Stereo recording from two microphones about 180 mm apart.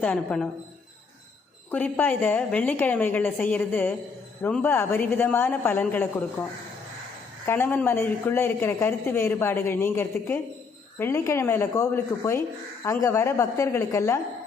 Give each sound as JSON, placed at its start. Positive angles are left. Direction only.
{"t": 0.0, "sound": "a man's voice", "side_deg": 5}
{"t": 1.7, "sound": "a man's voice", "side_deg": 10}
{"t": 7.4, "sound": "a man's voice", "side_deg": 10}